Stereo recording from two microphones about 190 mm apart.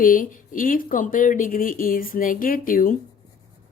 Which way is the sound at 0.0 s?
45° left (ahead or behind).